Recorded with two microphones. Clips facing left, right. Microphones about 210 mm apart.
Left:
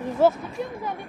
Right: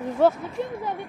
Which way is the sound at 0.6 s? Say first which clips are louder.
Right 2 dB; 25° right (ahead or behind).